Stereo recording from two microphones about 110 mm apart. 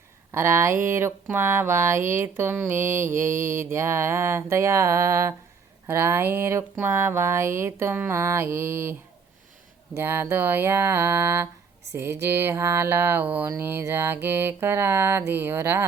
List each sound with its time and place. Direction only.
0.3 s speech: 25° right (ahead or behind)